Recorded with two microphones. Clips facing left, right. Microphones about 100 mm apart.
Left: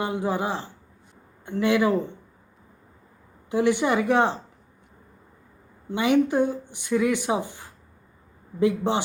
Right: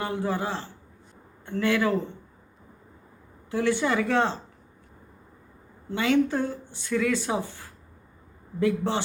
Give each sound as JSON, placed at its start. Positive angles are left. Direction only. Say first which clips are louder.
{"t": 0.0, "sound": "a woman's voice", "louder": "left 2 dB", "side_deg": 15}
{"t": 3.5, "sound": "a woman's voice", "louder": "left 3 dB", "side_deg": 15}
{"t": 5.9, "sound": "a woman's voice", "louder": "left 2 dB", "side_deg": 15}